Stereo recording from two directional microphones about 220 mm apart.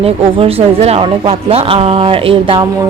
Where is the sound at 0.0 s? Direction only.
25° right (ahead or behind).